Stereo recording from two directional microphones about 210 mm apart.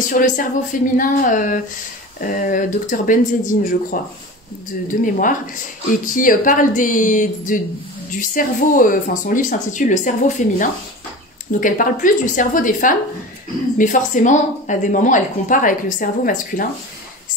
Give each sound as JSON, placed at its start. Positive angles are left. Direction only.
{"t": 0.2, "sound": "a woman's voice", "side_deg": 40}
{"t": 5.0, "sound": "a woman's voice", "side_deg": 40}